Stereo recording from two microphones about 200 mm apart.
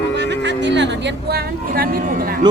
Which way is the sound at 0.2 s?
60° right (ahead or behind).